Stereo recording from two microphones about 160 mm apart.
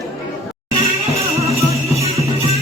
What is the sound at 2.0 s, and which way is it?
Music, 40° right (ahead or behind).